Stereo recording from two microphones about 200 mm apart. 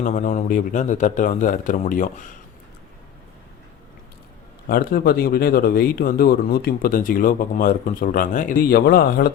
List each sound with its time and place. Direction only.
0.0 s speech: 40° left (ahead or behind)
4.7 s speech: 45° left (ahead or behind)